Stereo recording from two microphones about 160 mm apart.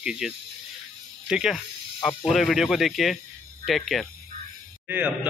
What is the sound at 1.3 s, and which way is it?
Speech, 5° right (ahead or behind).